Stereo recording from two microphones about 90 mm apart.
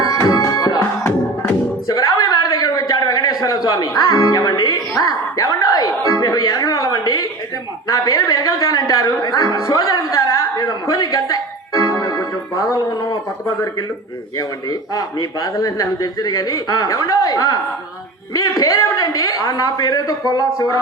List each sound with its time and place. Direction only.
0.0 s music: 40° left (ahead or behind)
1.9 s a sound: 45° left (ahead or behind)
7.9 s music: 40° left (ahead or behind)
14.3 s speech: 45° left (ahead or behind)